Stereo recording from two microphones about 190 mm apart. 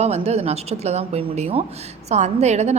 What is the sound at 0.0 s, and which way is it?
A woman's voice, 35° right (ahead or behind).